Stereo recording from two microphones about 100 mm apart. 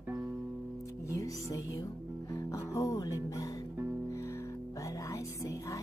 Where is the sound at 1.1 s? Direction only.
35° left (ahead or behind).